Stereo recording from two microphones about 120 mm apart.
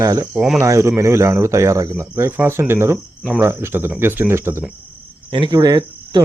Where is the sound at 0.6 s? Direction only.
25° right (ahead or behind).